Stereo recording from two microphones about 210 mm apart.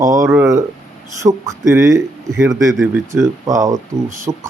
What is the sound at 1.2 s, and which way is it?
Speech, 15° right (ahead or behind).